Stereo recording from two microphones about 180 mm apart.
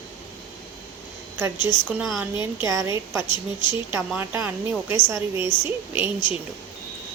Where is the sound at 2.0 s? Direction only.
Centre (ahead or behind).